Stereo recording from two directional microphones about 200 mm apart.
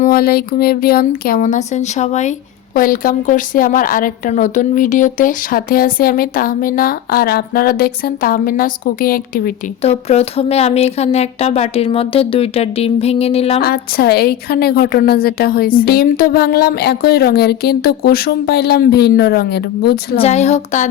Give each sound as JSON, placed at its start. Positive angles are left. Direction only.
{"t": 0.0, "sound": "a woman's voice", "side_deg": 45}
{"t": 9.8, "sound": "speech", "side_deg": 30}
{"t": 13.6, "sound": "a woman's voice", "side_deg": 50}
{"t": 20.1, "sound": "speech", "side_deg": 35}